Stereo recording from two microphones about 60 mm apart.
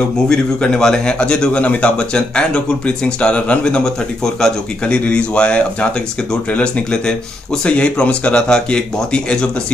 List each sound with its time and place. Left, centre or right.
0.3 s a man's voice: centre